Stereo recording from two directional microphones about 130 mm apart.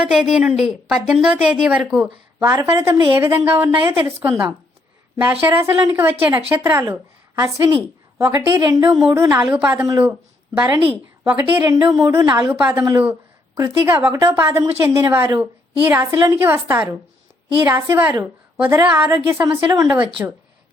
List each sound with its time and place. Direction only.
0.0 s a woman's voice: 5° right (ahead or behind)
2.4 s a woman's voice: 20° right (ahead or behind)
11.7 s a woman's voice: 25° right (ahead or behind)
13.7 s a woman's voice: 20° right (ahead or behind)